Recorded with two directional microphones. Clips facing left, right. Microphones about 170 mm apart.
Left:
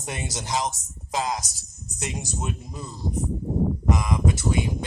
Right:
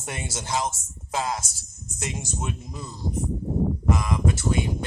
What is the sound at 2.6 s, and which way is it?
Speech, centre (ahead or behind).